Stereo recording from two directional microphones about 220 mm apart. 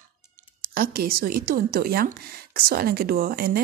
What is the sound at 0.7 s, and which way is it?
Speech, 40° right (ahead or behind).